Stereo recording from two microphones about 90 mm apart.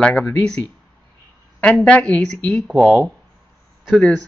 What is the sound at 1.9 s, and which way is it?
Speech, 10° left (ahead or behind).